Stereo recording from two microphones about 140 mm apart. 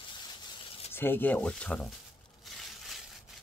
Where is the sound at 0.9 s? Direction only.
15° left (ahead or behind).